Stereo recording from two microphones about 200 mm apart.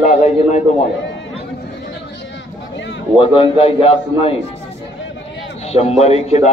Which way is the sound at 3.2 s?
25° left (ahead or behind).